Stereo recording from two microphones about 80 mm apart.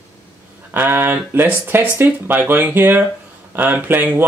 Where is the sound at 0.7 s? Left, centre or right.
Right.